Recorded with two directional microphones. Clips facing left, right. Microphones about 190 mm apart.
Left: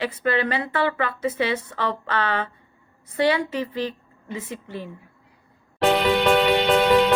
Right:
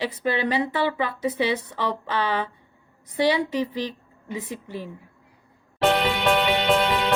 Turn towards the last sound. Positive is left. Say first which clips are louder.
# left 4 dB
turn(degrees=0)  # may be behind; listen again after turning